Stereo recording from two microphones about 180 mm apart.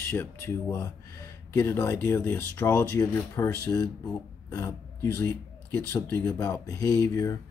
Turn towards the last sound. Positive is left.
turn(degrees=15)  # may be behind; listen again after turning